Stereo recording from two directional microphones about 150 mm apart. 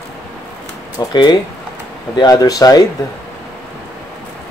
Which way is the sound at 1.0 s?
30° left (ahead or behind).